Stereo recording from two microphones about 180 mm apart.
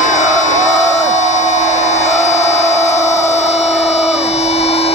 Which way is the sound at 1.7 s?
40° left (ahead or behind).